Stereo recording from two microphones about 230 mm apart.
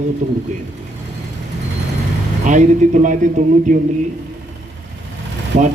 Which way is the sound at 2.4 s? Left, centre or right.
Right.